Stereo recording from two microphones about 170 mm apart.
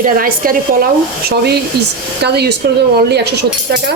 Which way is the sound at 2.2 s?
75° right (ahead or behind).